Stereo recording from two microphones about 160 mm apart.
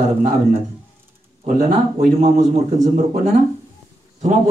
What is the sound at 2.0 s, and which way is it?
A man's voice, 45° right (ahead or behind).